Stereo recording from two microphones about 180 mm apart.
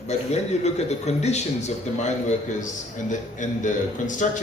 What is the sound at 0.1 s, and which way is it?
A man's voice, 35° left (ahead or behind).